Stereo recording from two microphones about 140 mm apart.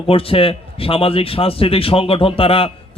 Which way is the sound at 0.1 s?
40° left (ahead or behind).